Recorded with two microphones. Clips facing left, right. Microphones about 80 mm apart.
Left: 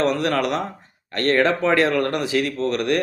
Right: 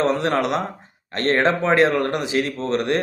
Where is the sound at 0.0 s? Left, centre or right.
Right.